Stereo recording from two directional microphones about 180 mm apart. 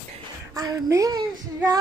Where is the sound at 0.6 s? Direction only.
20° right (ahead or behind).